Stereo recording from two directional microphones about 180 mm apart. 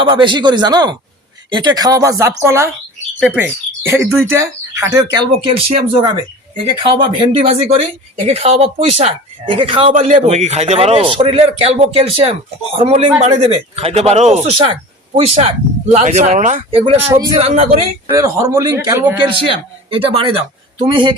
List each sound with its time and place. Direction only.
0.0 s speech: 25° right (ahead or behind)
5.4 s speech: 35° right (ahead or behind)
17.1 s speech: 25° right (ahead or behind)
18.2 s speech: 20° right (ahead or behind)
19.5 s speech: 30° right (ahead or behind)